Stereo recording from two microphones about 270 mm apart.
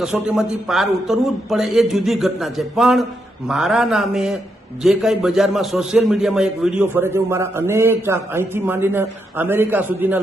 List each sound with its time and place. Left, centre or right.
0.0 s a man's voice: centre